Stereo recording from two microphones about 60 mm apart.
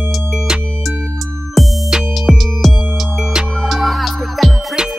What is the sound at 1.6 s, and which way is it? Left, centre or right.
Music, centre.